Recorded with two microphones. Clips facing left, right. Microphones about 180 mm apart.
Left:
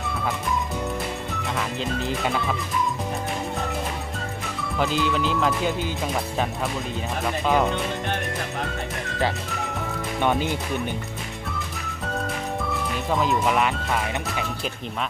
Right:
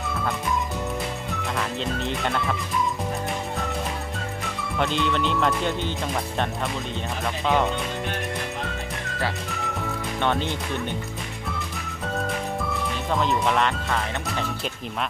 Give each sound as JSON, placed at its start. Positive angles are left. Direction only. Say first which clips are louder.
{"t": 1.6, "sound": "speech", "louder": "even", "side_deg": 0}
{"t": 4.7, "sound": "speech", "louder": "left 1 dB", "side_deg": 0}
{"t": 10.2, "sound": "speech", "louder": "left 2 dB", "side_deg": 10}
{"t": 13.1, "sound": "speech", "louder": "left 1 dB", "side_deg": 5}